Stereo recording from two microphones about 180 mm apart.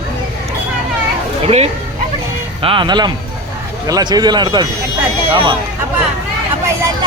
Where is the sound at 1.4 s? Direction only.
35° right (ahead or behind).